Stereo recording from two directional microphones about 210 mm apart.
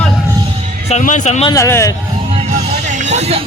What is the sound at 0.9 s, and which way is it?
Speech, 35° left (ahead or behind).